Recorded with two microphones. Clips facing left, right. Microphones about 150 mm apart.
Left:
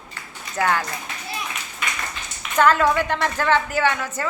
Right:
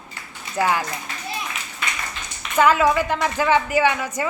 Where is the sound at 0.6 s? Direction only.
10° right (ahead or behind).